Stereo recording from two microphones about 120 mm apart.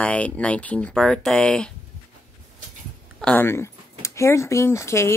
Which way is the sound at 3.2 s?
15° left (ahead or behind).